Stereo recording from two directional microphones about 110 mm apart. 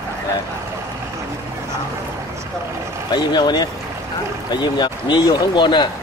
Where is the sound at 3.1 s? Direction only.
40° left (ahead or behind).